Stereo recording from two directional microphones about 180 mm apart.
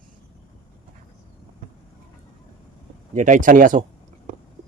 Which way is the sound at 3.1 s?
45° right (ahead or behind).